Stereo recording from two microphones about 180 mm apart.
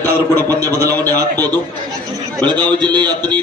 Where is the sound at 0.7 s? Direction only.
20° right (ahead or behind).